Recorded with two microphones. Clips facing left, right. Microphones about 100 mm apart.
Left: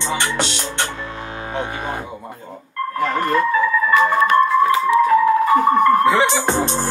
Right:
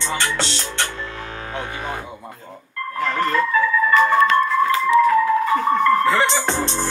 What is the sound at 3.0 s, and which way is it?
Speech, 15° left (ahead or behind).